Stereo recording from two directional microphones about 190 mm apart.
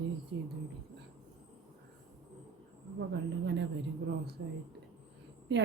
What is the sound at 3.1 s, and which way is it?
Speech, 65° right (ahead or behind).